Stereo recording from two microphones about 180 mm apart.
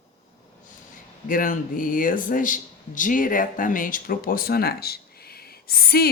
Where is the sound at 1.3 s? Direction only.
50° left (ahead or behind).